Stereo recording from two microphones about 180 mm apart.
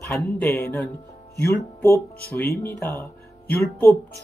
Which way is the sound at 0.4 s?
15° left (ahead or behind).